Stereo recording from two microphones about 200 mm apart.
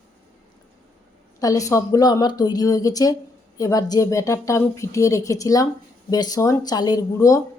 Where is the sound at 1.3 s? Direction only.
15° left (ahead or behind).